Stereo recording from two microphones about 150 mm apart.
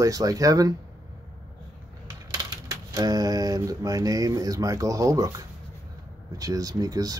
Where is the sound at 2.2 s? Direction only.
25° right (ahead or behind).